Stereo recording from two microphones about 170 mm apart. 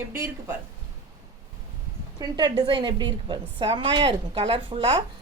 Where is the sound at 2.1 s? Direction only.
25° right (ahead or behind).